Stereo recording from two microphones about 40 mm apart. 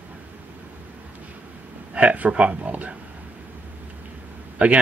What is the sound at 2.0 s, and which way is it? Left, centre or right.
Speech, right.